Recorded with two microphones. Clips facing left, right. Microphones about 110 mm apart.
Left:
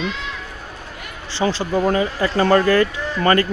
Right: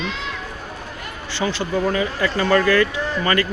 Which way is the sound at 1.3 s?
30° left (ahead or behind).